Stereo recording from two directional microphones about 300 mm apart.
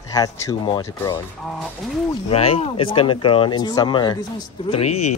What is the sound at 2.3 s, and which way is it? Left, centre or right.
Speech, centre.